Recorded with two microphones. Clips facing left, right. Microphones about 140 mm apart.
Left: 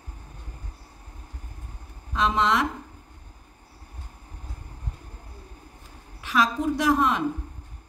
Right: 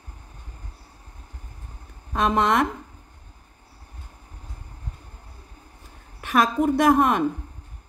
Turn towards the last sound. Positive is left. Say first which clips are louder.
# right 4 dB
turn(degrees=-55)  # may be behind; listen again after turning